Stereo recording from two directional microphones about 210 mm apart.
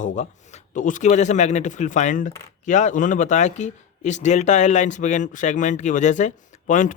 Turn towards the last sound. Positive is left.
turn(degrees=40)  # may be behind; listen again after turning